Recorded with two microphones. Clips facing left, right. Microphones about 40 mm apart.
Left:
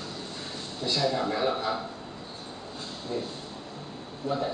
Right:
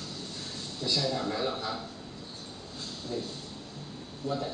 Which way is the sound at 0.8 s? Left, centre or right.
Centre.